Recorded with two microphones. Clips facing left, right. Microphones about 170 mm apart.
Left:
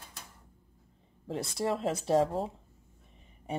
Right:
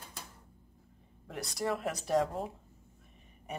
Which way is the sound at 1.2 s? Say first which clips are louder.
Left 3 dB; 25° left (ahead or behind).